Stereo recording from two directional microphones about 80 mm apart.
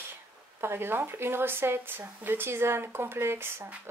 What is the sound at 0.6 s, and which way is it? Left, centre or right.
Speech, right.